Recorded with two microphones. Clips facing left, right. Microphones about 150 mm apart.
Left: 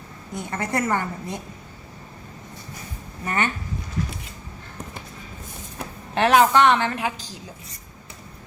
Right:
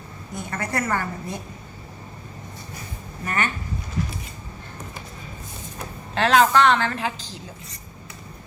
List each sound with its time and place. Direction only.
0.3 s a woman's voice: 25° left (ahead or behind)
3.2 s a woman's voice: 25° left (ahead or behind)
6.1 s a woman's voice: 15° left (ahead or behind)